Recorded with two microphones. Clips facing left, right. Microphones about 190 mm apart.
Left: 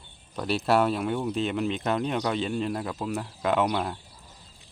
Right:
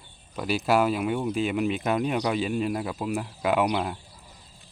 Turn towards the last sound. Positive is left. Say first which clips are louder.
# right 1 dB
turn(degrees=-10)  # may be behind; listen again after turning